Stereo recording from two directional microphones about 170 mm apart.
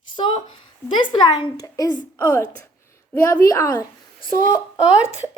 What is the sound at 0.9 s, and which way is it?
A child's voice, 25° left (ahead or behind).